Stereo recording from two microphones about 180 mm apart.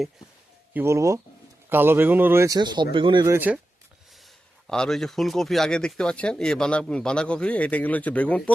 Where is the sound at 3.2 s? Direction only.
10° right (ahead or behind).